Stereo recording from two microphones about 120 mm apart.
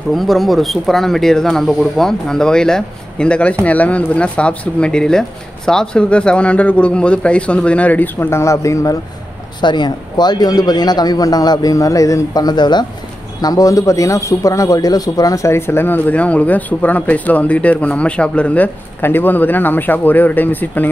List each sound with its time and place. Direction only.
0.1 s speech: centre (ahead or behind); by 8.9 s 25° left (ahead or behind)
9.6 s a man's voice: 40° left (ahead or behind); by 20.9 s 15° left (ahead or behind)